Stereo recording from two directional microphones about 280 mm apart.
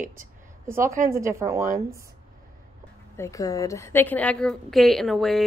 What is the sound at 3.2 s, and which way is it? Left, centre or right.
A woman's voice, centre.